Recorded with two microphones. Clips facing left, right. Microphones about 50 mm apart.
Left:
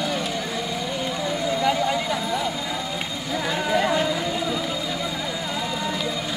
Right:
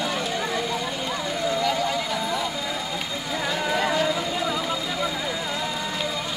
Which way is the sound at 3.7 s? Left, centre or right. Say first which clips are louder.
Left 3 dB; centre.